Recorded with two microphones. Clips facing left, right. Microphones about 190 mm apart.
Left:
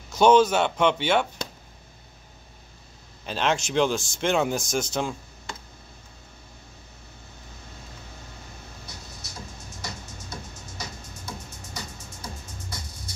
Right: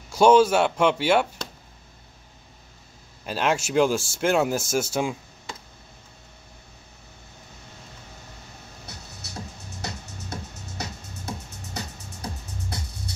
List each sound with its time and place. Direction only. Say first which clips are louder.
0.1 s a man's voice: right 1 dB; 5° right (ahead or behind)
3.3 s speech: right 1 dB; 5° right (ahead or behind)
10.3 s music: right 4 dB; 65° right (ahead or behind)